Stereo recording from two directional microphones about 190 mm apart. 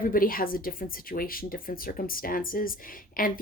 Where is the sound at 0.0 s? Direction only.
50° left (ahead or behind).